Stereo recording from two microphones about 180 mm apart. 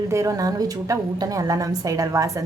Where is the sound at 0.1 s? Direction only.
15° right (ahead or behind).